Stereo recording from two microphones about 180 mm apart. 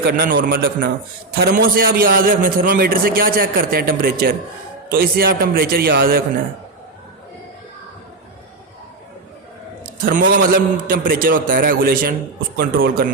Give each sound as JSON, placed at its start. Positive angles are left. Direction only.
{"t": 0.0, "sound": "a man's voice", "side_deg": -60}
{"t": 9.8, "sound": "a man's voice", "side_deg": -50}